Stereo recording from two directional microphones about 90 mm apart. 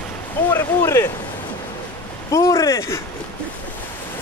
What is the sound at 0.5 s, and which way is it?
Speech, 30° left (ahead or behind).